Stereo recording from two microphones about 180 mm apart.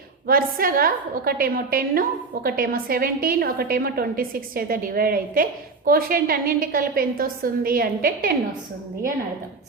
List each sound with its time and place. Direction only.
0.3 s a woman's voice: 55° right (ahead or behind)